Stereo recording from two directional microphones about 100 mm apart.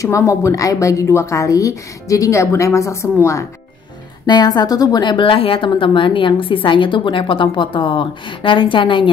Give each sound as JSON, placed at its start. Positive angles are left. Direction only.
{"t": 0.0, "sound": "a woman's voice", "side_deg": 30}
{"t": 4.3, "sound": "a woman's voice", "side_deg": 45}